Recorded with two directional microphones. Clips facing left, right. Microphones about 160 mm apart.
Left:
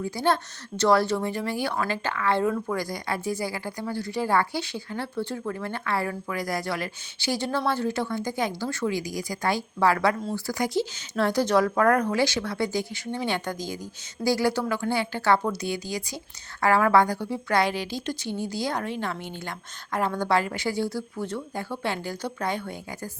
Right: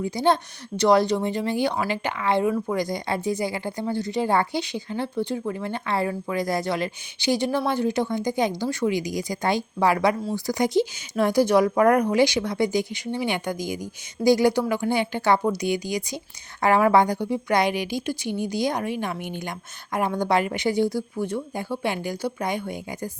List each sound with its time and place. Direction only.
0.0 s speech: 20° right (ahead or behind)